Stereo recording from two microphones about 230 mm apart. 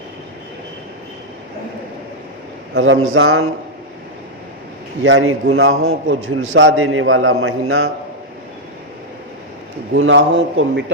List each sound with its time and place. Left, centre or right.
2.7 s a man's voice: right
5.0 s a man's voice: right
9.9 s a man's voice: right